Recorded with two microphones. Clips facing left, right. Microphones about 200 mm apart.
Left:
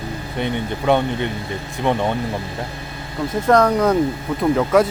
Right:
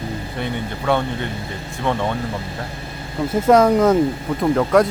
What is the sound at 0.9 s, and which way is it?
Speech, 20° left (ahead or behind).